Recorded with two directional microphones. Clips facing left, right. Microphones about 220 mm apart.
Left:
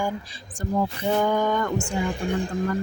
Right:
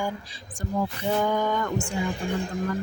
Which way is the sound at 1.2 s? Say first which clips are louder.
Left 2 dB; 50° left (ahead or behind).